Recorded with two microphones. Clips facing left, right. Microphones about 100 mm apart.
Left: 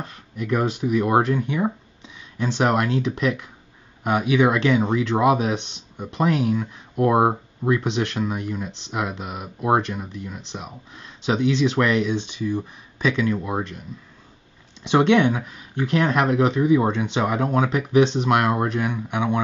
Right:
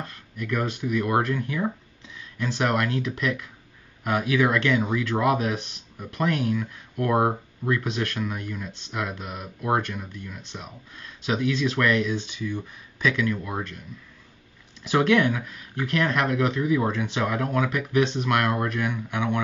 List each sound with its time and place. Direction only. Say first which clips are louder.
0.0 s speech: left 3 dB; 25° left (ahead or behind)